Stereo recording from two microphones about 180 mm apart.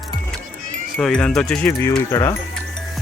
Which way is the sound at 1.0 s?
5° left (ahead or behind).